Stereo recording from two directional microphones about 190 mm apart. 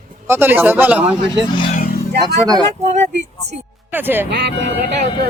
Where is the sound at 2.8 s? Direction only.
40° right (ahead or behind).